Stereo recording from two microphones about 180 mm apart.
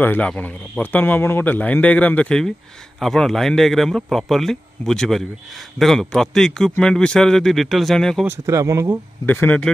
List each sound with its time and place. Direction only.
0.0 s a man's voice: 10° left (ahead or behind)
8.3 s speech: 15° right (ahead or behind)
9.2 s a man's voice: 10° left (ahead or behind)